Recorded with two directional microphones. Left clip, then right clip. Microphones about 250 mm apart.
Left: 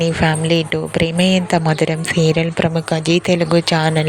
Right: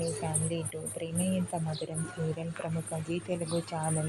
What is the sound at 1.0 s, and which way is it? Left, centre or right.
Speech, left.